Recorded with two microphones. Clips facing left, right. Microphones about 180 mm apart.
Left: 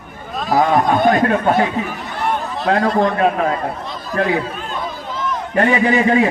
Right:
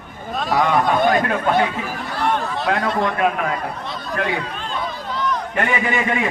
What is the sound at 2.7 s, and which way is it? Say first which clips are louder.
A man's voice: left 6 dB; 30° left (ahead or behind).